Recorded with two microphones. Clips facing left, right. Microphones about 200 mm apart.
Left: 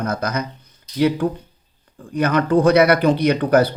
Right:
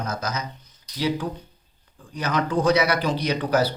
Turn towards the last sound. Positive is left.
turn(degrees=55)  # may be behind; listen again after turning